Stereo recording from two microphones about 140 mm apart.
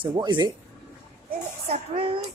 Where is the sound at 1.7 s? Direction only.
45° right (ahead or behind).